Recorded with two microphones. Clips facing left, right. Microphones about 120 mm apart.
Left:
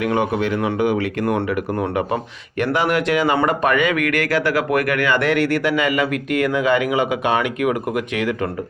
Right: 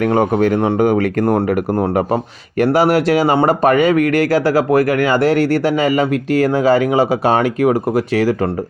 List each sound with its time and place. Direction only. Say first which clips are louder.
0.0 s speech: right 6 dB; 40° right (ahead or behind)
2.6 s speech: right 6 dB; 35° right (ahead or behind)